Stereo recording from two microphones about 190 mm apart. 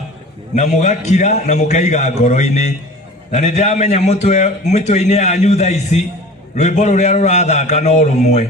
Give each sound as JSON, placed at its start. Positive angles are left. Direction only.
{"t": 0.5, "sound": "a man's voice", "side_deg": 35}